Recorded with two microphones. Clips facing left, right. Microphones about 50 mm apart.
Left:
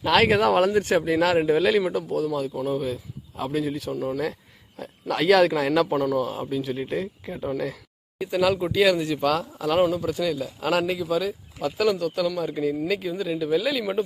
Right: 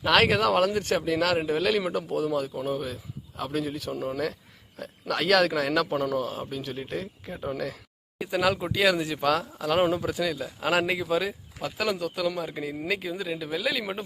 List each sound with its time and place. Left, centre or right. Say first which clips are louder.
0.0 s speech: left 2 dB; centre
0.3 s speech: left 3 dB; centre
1.4 s speech: left 6 dB; centre
1.8 s speech: left 3 dB; centre
3.3 s speech: left 4 dB; centre
13.0 s speech: left 5 dB; centre